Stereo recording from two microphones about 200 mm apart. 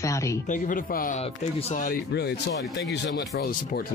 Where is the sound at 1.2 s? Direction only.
30° left (ahead or behind).